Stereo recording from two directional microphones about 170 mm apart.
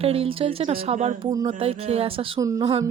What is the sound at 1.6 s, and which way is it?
Speech, 35° right (ahead or behind).